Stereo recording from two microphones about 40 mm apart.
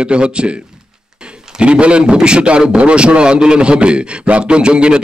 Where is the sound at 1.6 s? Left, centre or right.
Right.